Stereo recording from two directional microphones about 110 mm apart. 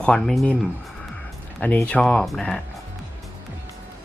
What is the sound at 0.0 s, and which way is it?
Speech, 5° left (ahead or behind).